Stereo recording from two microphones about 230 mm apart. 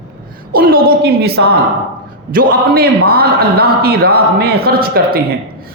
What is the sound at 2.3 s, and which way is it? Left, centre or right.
A man's voice, right.